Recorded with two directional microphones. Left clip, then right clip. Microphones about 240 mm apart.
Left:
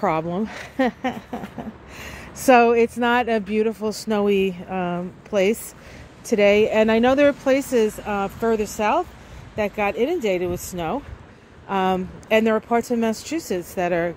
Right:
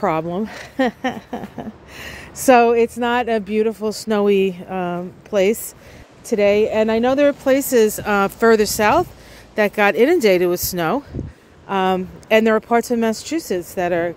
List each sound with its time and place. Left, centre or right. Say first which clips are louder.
0.0 s speech: right 2 dB; centre